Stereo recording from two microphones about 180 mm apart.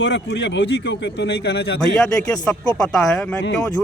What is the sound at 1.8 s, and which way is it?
Speech, 5° left (ahead or behind).